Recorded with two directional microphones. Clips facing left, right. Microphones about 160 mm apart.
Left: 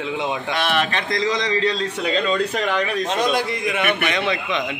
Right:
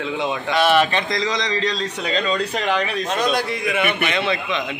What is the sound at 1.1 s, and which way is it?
Speech, 55° left (ahead or behind).